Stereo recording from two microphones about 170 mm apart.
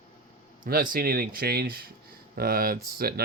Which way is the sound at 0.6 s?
55° right (ahead or behind).